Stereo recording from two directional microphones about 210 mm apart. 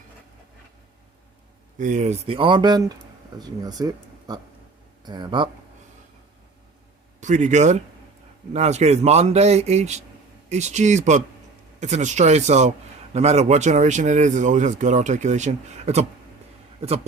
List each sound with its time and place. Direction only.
1.8 s speech: 35° right (ahead or behind)
7.2 s speech: 35° right (ahead or behind)